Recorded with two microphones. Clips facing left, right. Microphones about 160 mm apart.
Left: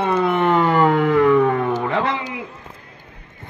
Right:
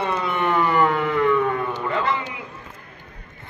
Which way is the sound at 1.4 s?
50° left (ahead or behind).